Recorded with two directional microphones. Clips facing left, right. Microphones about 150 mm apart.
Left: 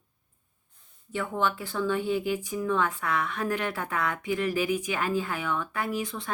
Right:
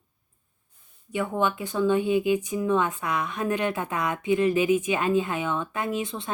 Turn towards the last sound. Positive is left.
turn(degrees=-25)  # may be behind; listen again after turning